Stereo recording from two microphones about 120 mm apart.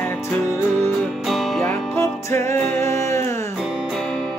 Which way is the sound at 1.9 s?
25° left (ahead or behind).